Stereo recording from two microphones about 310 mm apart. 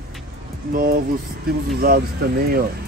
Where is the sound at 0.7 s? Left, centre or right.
Right.